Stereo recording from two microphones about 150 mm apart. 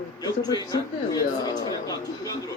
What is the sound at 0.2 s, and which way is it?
Speech, 25° left (ahead or behind).